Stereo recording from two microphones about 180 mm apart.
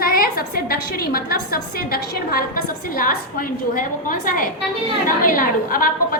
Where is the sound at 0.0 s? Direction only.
55° left (ahead or behind).